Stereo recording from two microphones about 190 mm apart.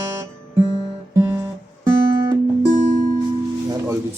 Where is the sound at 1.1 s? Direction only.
20° right (ahead or behind).